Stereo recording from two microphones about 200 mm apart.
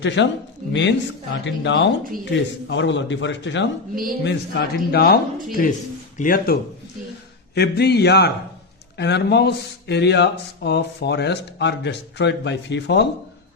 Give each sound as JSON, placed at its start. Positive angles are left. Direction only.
{"t": 0.2, "sound": "a man's voice", "side_deg": 65}